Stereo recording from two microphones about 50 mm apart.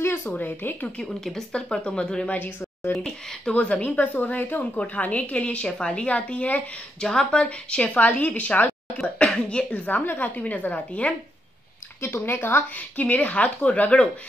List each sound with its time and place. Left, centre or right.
0.0 s a sound: left
0.3 s a woman's voice: left
1.0 s speech: centre
1.5 s speech: centre
2.2 s speech: left
2.9 s speech: centre
3.6 s a woman's voice: left
7.0 s speech: centre
9.8 s a woman's voice: left
12.2 s speech: left
12.7 s a woman's voice: left